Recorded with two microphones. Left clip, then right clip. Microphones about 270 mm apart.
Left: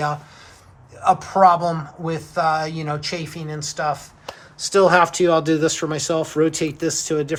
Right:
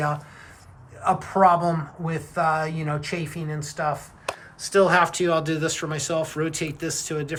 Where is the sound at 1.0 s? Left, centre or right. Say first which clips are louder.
Left 4 dB; centre.